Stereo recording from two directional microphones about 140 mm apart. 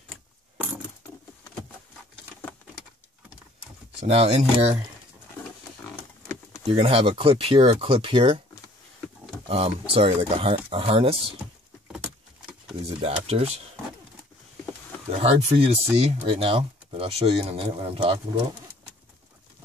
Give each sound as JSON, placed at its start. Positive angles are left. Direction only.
{"t": 4.1, "sound": "speech", "side_deg": -45}
{"t": 6.7, "sound": "speech", "side_deg": -45}
{"t": 9.5, "sound": "speech", "side_deg": -45}
{"t": 12.8, "sound": "speech", "side_deg": -45}
{"t": 15.1, "sound": "speech", "side_deg": -45}